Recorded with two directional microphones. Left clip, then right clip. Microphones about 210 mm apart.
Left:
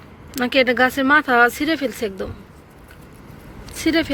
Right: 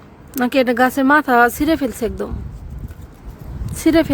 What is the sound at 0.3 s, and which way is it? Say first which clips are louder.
Speech: right 1 dB; 35° right (ahead or behind).